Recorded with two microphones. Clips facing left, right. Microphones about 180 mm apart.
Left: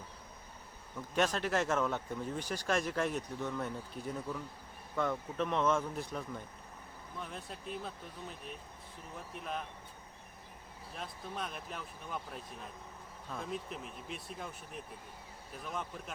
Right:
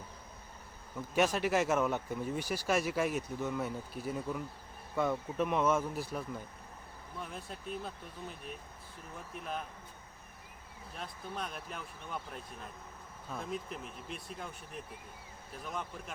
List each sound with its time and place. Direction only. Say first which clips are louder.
1.1 s speech: right 2 dB; 10° right (ahead or behind)
9.3 s speech: right 1 dB; centre (ahead or behind)
10.9 s speech: even; centre (ahead or behind)
15.6 s speech: even; centre (ahead or behind)